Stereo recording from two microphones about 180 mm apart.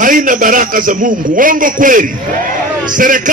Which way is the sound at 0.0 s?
50° right (ahead or behind).